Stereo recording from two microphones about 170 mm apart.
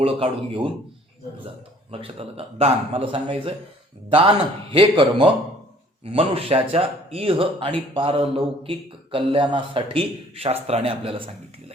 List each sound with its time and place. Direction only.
0.0 s speech: 30° right (ahead or behind)
1.9 s speech: 35° right (ahead or behind)
4.7 s speech: 30° right (ahead or behind)